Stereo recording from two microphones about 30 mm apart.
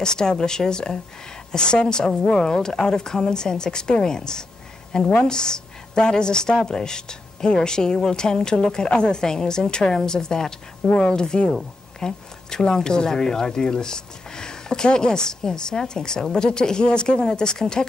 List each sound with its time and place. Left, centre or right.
0.0 s a woman's voice: left